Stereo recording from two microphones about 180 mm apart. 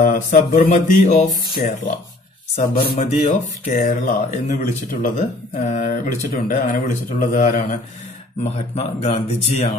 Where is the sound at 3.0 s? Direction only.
40° left (ahead or behind).